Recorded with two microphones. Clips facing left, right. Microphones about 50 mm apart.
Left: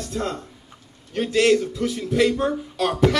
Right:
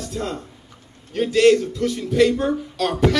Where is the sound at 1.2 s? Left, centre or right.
Centre.